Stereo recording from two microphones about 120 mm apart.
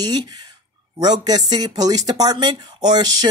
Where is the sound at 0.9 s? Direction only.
35° right (ahead or behind).